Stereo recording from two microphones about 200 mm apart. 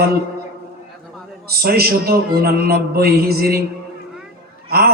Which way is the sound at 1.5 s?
50° right (ahead or behind).